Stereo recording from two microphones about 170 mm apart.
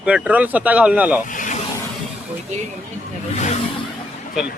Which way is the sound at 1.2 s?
50° left (ahead or behind).